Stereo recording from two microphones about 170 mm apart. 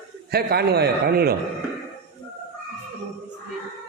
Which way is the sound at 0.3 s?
65° right (ahead or behind).